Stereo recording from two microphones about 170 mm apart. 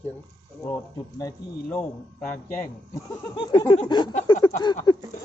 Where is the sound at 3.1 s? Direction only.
25° left (ahead or behind).